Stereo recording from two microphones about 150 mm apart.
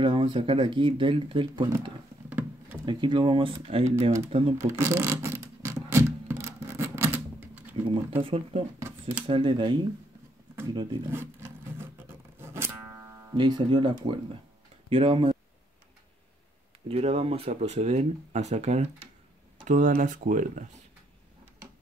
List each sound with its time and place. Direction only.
0.0 s speech: 35° right (ahead or behind)
2.2 s a sound: 10° right (ahead or behind)
2.8 s speech: 30° right (ahead or behind)
4.7 s a sound: 20° right (ahead or behind)
7.9 s speech: 35° right (ahead or behind)
11.1 s music: 15° right (ahead or behind)
13.3 s speech: 30° right (ahead or behind)
16.8 s speech: 45° right (ahead or behind)